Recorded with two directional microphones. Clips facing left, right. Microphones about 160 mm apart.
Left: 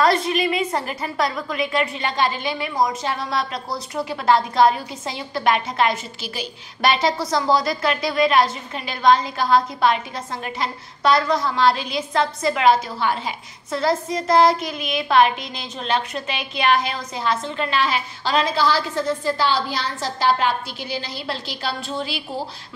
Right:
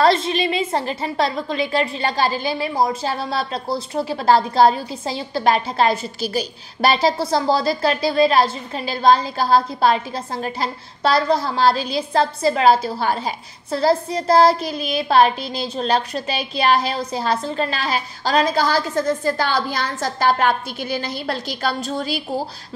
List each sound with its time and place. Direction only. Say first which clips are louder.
0.0 s a woman's voice: right 2 dB; 25° right (ahead or behind); by 22.2 s 45° right (ahead or behind)